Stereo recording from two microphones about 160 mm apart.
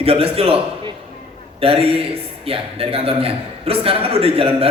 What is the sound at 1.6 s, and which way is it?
A man's voice, 35° right (ahead or behind).